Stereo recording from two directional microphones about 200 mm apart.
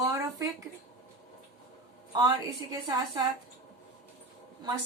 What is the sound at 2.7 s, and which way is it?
Speech, 20° right (ahead or behind).